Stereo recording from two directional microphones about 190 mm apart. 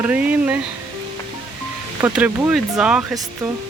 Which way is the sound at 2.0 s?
10° right (ahead or behind).